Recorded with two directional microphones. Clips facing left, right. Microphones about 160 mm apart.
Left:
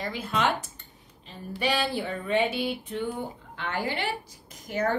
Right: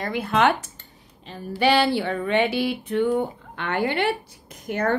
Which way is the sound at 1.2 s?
80° right.